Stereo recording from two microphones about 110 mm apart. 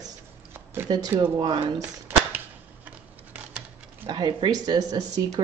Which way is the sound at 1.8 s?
20° right (ahead or behind).